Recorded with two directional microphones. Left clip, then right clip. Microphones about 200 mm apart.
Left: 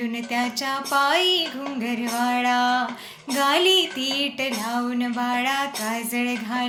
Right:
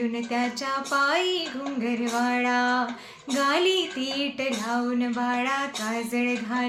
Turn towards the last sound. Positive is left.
turn(degrees=-10)  # may be behind; listen again after turning